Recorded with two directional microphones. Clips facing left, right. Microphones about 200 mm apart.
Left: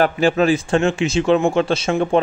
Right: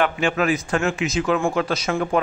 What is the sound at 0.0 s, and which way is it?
A man's voice, 35° left (ahead or behind).